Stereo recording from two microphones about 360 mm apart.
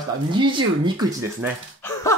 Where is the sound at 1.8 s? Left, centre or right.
Centre.